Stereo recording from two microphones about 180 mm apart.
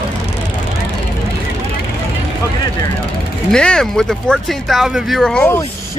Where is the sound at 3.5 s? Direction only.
5° left (ahead or behind).